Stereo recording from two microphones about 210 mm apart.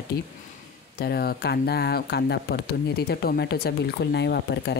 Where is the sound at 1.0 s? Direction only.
50° left (ahead or behind).